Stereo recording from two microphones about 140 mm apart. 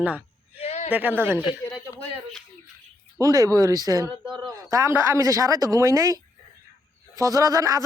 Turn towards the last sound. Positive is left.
turn(degrees=-25)  # may be behind; listen again after turning